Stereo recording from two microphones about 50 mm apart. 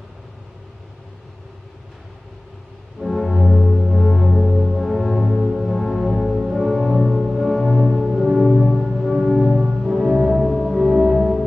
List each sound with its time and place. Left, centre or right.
3.0 s music: centre
7.2 s music: centre
7.4 s music: centre
7.9 s music: centre
8.8 s church bell: centre
9.6 s music: centre
9.8 s music: centre